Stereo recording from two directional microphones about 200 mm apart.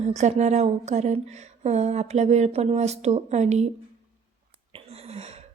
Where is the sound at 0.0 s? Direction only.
35° right (ahead or behind).